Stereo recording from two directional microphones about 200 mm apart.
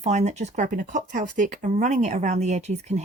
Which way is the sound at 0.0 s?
35° right (ahead or behind).